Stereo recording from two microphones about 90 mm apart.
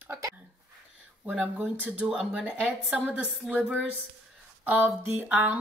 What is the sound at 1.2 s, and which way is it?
Speech, 15° right (ahead or behind).